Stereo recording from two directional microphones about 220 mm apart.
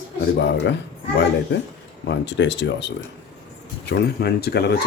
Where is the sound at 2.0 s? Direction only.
55° left (ahead or behind).